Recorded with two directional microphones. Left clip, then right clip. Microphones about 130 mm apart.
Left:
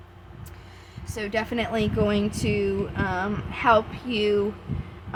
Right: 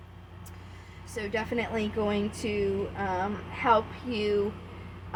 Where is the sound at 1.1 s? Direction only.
45° left (ahead or behind).